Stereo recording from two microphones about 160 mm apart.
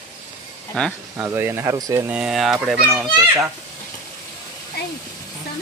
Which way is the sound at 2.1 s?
5° right (ahead or behind).